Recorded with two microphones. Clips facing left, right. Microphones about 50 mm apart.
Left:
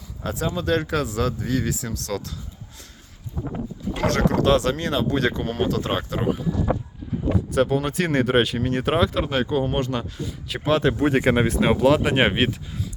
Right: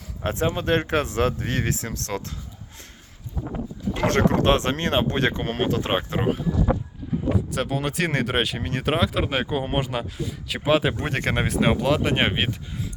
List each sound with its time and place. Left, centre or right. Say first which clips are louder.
0.2 s speech: right 2 dB; right
4.1 s speech: left 1 dB; right
5.7 s speech: right 1 dB; right
7.5 s speech: left 5 dB; centre
9.2 s speech: left 2 dB; centre
10.9 s speech: left 6 dB; centre